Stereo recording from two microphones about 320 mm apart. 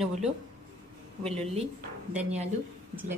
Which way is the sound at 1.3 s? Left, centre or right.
Centre.